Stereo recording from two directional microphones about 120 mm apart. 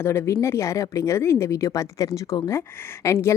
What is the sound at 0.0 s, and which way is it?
A woman's voice, 20° left (ahead or behind).